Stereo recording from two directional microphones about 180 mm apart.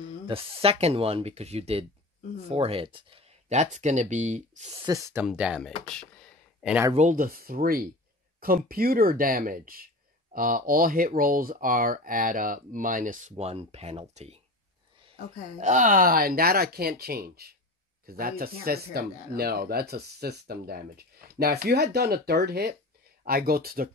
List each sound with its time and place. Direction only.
0.3 s speech: 30° right (ahead or behind)
4.8 s speech: 15° right (ahead or behind)
5.2 s speech: 5° right (ahead or behind)
6.6 s speech: 5° right (ahead or behind)
6.9 s speech: 45° right (ahead or behind)
15.6 s speech: 45° right (ahead or behind)